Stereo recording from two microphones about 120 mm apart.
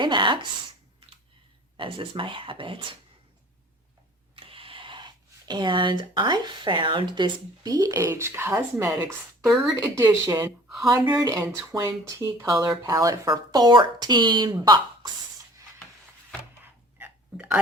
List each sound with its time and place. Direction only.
0.0 s speech: 40° right (ahead or behind)
1.7 s speech: 45° right (ahead or behind)
4.4 s a sound: 50° right (ahead or behind)
5.5 s speech: 40° right (ahead or behind); by 9.0 s 20° right (ahead or behind)
9.4 s speech: centre (ahead or behind)
9.9 s speech: 25° right (ahead or behind)
10.8 s speech: 30° right (ahead or behind)
17.0 s a sound: 10° right (ahead or behind)